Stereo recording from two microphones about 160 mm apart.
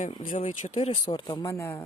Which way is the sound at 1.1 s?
30° left (ahead or behind).